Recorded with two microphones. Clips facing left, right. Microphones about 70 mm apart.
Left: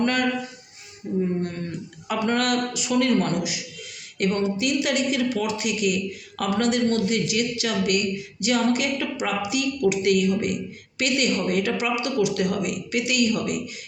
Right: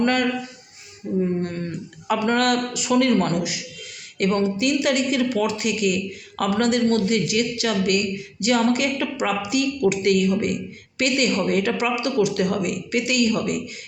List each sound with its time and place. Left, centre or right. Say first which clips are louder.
0.0 s speech: right 2 dB; right
2.0 s speech: right 3 dB; right